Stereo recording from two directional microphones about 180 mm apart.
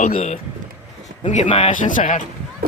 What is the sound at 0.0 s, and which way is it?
Speech, 40° left (ahead or behind).